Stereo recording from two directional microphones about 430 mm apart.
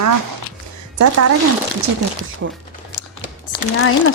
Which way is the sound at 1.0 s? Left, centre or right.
Right.